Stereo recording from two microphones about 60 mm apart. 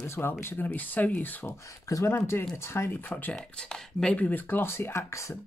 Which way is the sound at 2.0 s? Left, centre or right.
Left.